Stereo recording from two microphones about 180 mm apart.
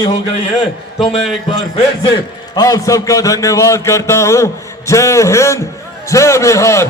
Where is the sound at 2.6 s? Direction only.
20° left (ahead or behind).